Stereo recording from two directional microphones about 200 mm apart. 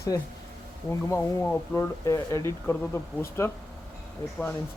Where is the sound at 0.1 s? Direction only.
15° left (ahead or behind).